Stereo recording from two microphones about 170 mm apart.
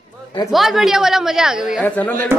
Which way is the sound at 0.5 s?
Centre (ahead or behind).